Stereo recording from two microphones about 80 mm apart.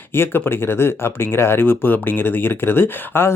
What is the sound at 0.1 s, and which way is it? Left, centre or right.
Speech, left.